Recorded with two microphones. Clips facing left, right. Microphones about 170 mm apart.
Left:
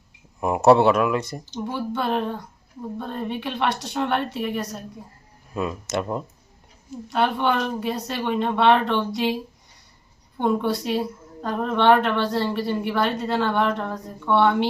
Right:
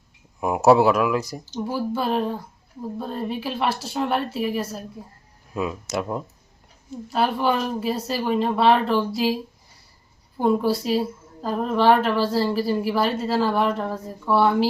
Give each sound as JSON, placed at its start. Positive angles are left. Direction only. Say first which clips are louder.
{"t": 0.3, "sound": "a woman's voice", "louder": "even", "side_deg": 0}